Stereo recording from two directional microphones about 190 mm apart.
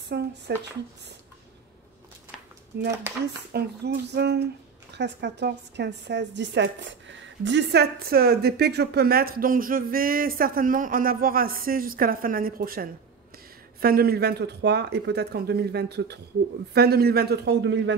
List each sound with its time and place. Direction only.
0.1 s a sound: 60° right (ahead or behind)
0.5 s speech: 60° right (ahead or behind)
2.7 s a woman's voice: 55° right (ahead or behind)